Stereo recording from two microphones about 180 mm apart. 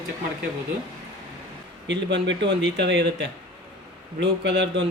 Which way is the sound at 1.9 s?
75° right (ahead or behind).